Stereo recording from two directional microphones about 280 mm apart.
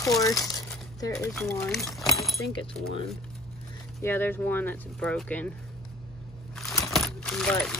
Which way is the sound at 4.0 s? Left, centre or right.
Centre.